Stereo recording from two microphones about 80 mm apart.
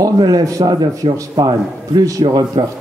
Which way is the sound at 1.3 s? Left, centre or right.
Right.